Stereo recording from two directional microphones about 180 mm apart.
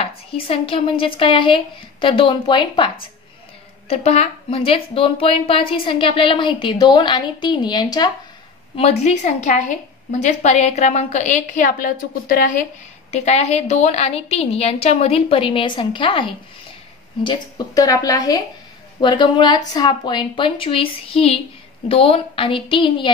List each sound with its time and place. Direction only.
0.0 s a woman's voice: 30° left (ahead or behind)
3.9 s a woman's voice: 35° left (ahead or behind)
9.0 s a woman's voice: 40° left (ahead or behind)
13.1 s a woman's voice: 40° left (ahead or behind)